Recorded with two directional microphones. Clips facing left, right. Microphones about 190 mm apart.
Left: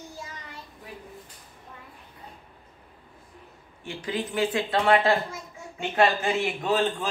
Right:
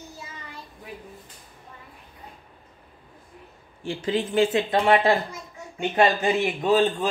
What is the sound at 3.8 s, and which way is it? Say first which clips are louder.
A man's voice: right 5 dB; 25° right (ahead or behind).